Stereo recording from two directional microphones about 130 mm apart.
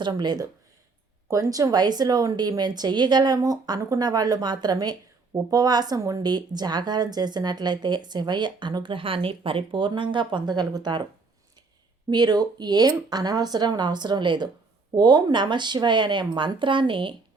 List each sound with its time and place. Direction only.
0.0 s a woman's voice: 35° right (ahead or behind)
12.1 s a woman's voice: 30° right (ahead or behind)